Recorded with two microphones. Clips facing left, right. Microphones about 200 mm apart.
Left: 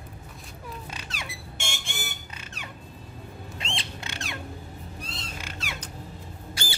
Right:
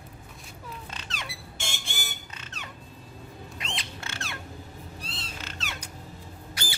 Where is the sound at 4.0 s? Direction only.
15° left (ahead or behind).